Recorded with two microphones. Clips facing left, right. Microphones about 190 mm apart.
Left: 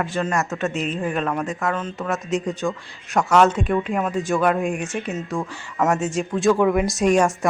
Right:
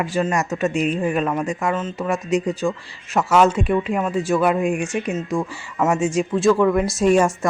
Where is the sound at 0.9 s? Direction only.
5° right (ahead or behind).